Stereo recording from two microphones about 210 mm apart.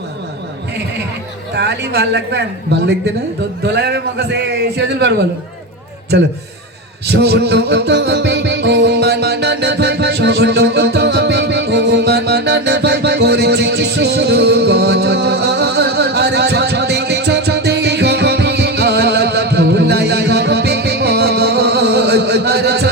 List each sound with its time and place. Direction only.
1.5 s a man's voice: 50° right (ahead or behind)
7.1 s music: 50° right (ahead or behind)